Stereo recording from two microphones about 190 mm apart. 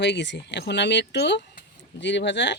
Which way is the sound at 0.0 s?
65° left (ahead or behind).